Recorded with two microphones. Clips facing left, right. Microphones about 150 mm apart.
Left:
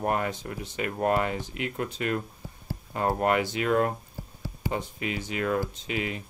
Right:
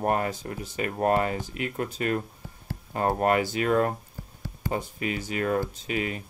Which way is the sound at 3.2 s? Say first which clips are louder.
Right 2 dB; 40° right (ahead or behind).